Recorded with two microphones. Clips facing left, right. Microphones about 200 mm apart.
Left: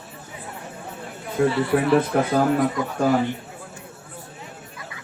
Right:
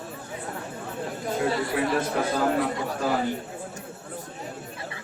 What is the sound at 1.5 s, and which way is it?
Speech, 40° right (ahead or behind).